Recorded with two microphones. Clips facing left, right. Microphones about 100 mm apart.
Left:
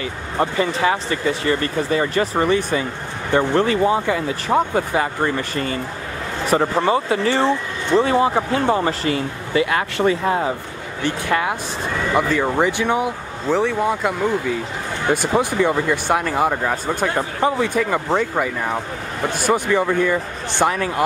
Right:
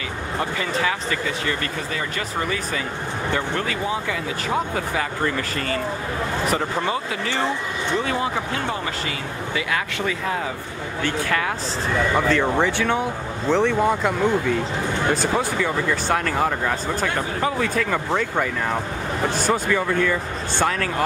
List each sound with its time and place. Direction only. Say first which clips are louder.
0.4 s speech: left 6 dB; 30° left (ahead or behind)
11.1 s speech: left 4 dB; 20° left (ahead or behind)
15.3 s speech: left 4 dB; 15° left (ahead or behind)